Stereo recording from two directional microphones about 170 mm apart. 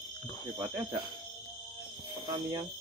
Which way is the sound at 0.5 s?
15° right (ahead or behind).